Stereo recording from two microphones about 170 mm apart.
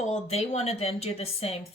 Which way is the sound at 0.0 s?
40° left (ahead or behind).